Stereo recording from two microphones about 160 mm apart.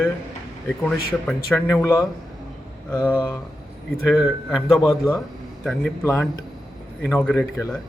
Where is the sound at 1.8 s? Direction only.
20° left (ahead or behind).